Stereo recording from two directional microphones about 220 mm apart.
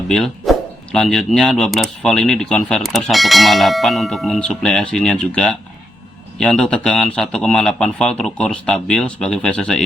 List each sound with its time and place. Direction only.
0.1 s dog: centre (ahead or behind)
0.9 s speech: centre (ahead or behind)